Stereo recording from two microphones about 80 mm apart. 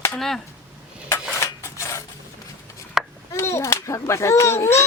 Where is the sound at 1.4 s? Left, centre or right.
Left.